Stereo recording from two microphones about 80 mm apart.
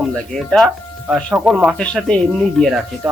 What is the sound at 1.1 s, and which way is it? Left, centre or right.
Speech, centre.